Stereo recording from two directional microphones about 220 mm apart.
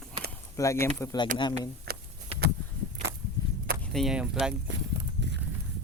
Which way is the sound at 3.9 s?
Centre (ahead or behind).